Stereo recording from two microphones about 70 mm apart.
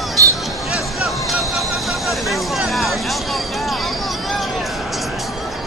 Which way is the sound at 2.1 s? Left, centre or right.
Centre.